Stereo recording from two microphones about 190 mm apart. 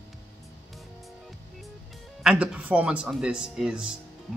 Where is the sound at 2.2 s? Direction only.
5° right (ahead or behind).